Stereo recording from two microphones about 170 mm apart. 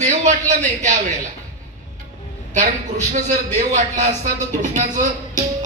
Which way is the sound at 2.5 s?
45° right (ahead or behind).